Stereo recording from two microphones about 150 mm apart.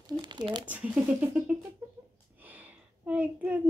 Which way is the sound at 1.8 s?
15° right (ahead or behind).